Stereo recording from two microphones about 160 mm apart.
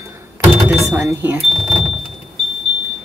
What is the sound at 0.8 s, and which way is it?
Speech, 15° right (ahead or behind).